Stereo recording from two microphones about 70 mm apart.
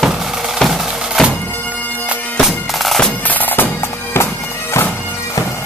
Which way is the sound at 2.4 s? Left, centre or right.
Centre.